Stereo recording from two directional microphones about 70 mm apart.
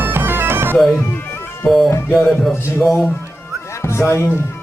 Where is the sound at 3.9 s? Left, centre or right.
Left.